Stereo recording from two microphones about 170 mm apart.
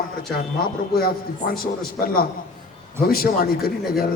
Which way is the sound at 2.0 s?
60° left (ahead or behind).